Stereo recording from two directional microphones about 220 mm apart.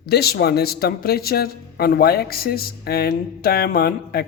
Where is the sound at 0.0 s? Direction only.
45° left (ahead or behind).